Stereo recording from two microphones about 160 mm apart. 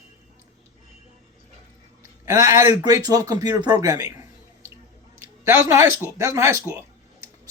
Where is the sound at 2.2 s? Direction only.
20° right (ahead or behind).